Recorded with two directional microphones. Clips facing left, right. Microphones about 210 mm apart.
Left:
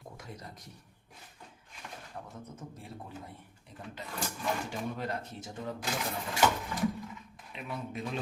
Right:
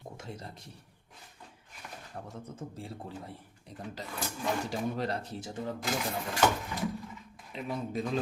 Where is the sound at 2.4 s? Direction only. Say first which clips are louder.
Right 4 dB; 30° right (ahead or behind).